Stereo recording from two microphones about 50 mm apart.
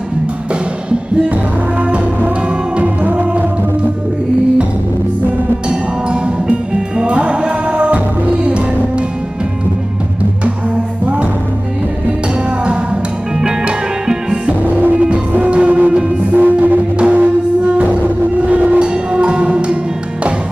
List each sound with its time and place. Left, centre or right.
1.8 s music: right
6.4 s music: right
13.4 s music: centre
14.8 s music: right
18.5 s train: right
18.8 s music: right